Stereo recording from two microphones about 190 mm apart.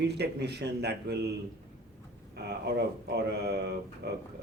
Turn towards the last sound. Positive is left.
turn(degrees=-60)  # may be behind; listen again after turning